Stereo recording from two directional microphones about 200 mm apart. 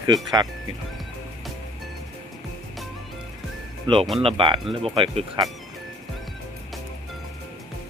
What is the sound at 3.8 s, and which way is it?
Speech, 25° right (ahead or behind).